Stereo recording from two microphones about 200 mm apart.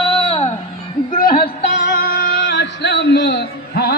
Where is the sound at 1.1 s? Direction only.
45° left (ahead or behind).